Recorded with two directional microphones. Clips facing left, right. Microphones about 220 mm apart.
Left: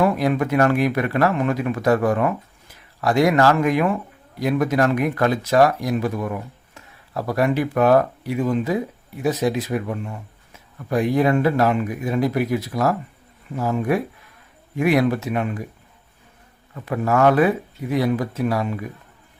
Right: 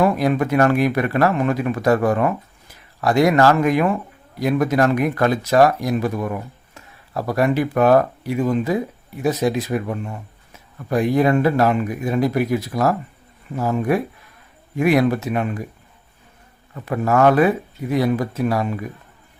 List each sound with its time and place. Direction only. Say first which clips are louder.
0.0 s speech: right 1 dB; 40° right (ahead or behind)
10.8 s speech: right 1 dB; 40° right (ahead or behind)
16.9 s speech: right 2 dB; 40° right (ahead or behind)